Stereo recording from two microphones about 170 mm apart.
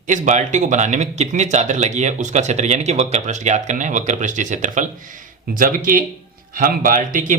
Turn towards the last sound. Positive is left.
turn(degrees=-50)  # may be behind; listen again after turning